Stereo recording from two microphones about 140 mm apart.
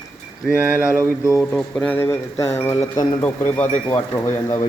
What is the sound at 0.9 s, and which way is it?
Speech, 20° left (ahead or behind).